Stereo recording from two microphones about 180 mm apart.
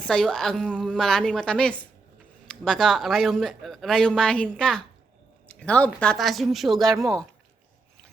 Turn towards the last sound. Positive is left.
turn(degrees=0)  # may be behind; listen again after turning